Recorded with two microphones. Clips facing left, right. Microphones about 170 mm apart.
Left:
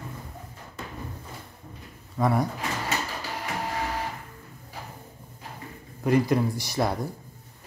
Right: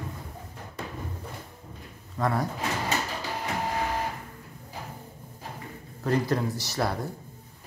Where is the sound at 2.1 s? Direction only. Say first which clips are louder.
Left 3 dB; 10° left (ahead or behind).